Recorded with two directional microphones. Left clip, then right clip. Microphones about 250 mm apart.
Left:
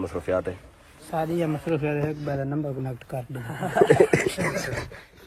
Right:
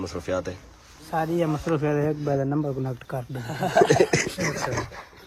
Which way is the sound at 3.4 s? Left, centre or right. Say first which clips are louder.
Right 6 dB; right.